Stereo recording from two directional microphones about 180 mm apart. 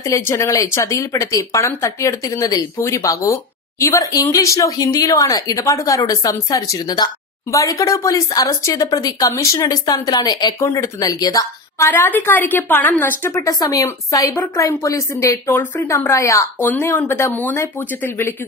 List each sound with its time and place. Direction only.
0.0 s a woman's voice: 15° left (ahead or behind)